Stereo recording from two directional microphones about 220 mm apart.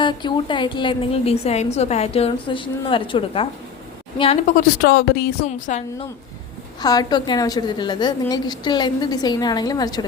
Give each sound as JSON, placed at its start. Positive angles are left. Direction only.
{"t": 0.0, "sound": "a woman's voice", "side_deg": 20}
{"t": 5.5, "sound": "a woman's voice", "side_deg": 35}
{"t": 6.8, "sound": "a woman's voice", "side_deg": 20}